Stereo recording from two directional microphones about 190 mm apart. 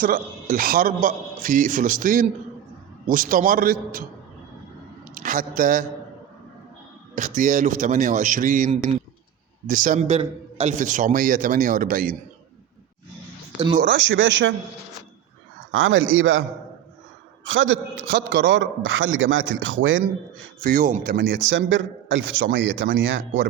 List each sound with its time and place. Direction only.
0.0 s a man's voice: 45° right (ahead or behind)
5.1 s speech: 45° right (ahead or behind)
7.2 s a man's voice: 45° right (ahead or behind)
13.8 s a man's voice: 85° right
15.7 s a man's voice: 90° right
20.7 s a man's voice: 50° right (ahead or behind)
21.2 s a man's voice: 80° right